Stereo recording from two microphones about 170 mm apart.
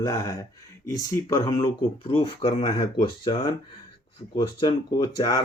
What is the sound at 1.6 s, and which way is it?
Speech, 30° left (ahead or behind).